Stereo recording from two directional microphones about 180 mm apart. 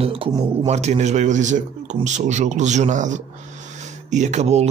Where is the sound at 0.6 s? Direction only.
40° right (ahead or behind).